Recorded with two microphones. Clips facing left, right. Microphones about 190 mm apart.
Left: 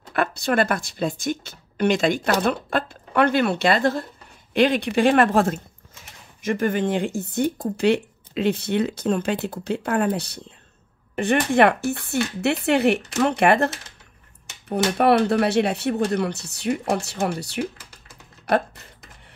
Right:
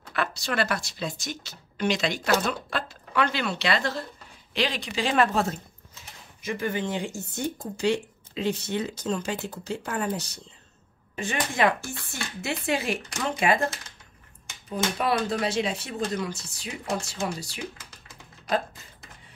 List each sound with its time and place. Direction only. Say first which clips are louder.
0.1 s speech: left 7 dB; 55° left (ahead or behind)
14.7 s speech: left 8 dB; 65° left (ahead or behind)
18.4 s a sound: left 6 dB; 65° left (ahead or behind)